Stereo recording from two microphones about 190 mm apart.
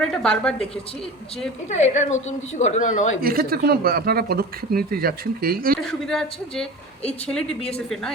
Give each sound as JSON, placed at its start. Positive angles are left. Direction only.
{"t": 0.0, "sound": "speech", "side_deg": 5}
{"t": 1.7, "sound": "a woman's voice", "side_deg": 35}
{"t": 3.2, "sound": "speech", "side_deg": -50}
{"t": 5.9, "sound": "speech", "side_deg": 5}